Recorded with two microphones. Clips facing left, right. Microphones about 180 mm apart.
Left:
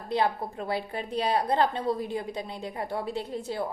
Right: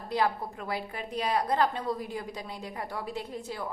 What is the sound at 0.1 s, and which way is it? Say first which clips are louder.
A woman's voice: left 2 dB; 25° left (ahead or behind).